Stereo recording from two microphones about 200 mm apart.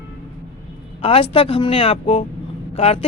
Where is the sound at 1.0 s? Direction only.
30° left (ahead or behind).